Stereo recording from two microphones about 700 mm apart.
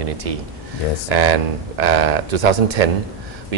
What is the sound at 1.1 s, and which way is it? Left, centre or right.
Speech, right.